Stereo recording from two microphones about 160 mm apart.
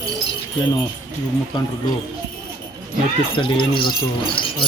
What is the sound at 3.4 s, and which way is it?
Speech, 30° left (ahead or behind).